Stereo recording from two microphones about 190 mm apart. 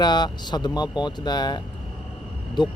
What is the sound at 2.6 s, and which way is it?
Speech, 25° left (ahead or behind).